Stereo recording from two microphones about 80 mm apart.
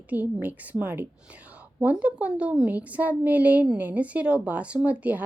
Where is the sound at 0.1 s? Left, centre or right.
Right.